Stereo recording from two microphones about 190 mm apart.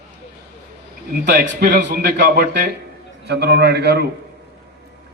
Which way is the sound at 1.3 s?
50° right (ahead or behind).